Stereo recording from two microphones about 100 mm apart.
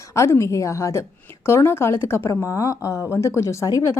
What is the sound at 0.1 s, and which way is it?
A woman's voice, 30° left (ahead or behind).